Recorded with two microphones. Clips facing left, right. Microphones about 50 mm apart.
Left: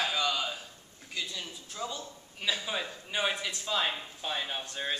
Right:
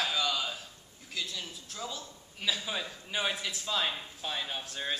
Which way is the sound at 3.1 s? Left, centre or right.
Centre.